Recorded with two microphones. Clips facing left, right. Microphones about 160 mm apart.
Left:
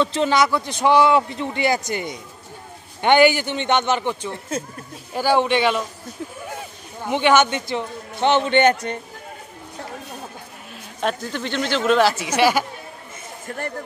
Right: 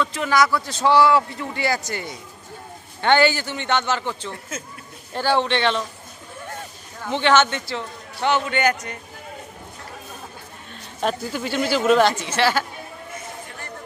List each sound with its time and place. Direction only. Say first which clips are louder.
0.0 s a man's voice: left 2 dB; 25° left (ahead or behind); by 5.9 s 10° left (ahead or behind)
7.0 s a man's voice: left 1 dB; 15° left (ahead or behind)
11.0 s speech: even; 5° right (ahead or behind); by 12.6 s 15° left (ahead or behind)
13.5 s speech: left 9 dB; 50° left (ahead or behind)